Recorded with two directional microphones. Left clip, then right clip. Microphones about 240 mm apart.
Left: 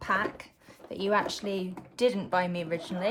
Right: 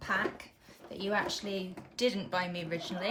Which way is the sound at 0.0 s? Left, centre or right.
Left.